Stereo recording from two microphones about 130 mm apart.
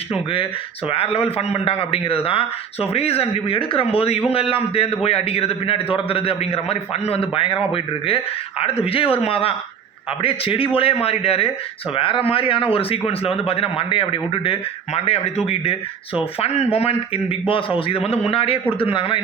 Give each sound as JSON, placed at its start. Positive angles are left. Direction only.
{"t": 0.9, "sound": "speech", "side_deg": 50}